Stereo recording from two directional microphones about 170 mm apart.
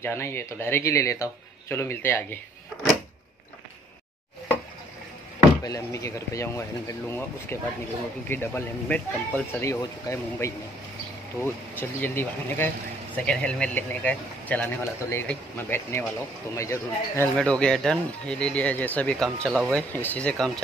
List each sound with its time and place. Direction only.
0.0 s speech: 15° left (ahead or behind)
5.6 s speech: 20° left (ahead or behind)
17.4 s speech: 5° left (ahead or behind)